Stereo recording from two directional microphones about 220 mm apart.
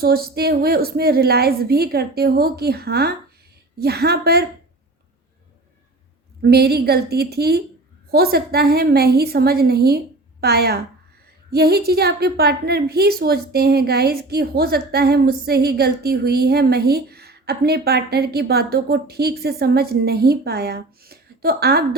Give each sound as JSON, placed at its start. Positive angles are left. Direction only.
{"t": 0.0, "sound": "a woman's voice", "side_deg": -45}
{"t": 6.4, "sound": "a woman's voice", "side_deg": -45}